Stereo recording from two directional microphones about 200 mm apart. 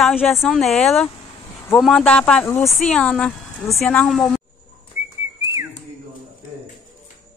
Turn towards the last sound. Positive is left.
turn(degrees=-15)  # may be behind; listen again after turning